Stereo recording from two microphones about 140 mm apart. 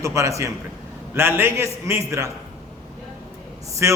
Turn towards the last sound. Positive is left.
turn(degrees=-20)  # may be behind; listen again after turning